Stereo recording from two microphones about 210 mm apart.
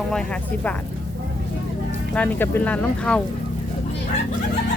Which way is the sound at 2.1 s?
10° left (ahead or behind).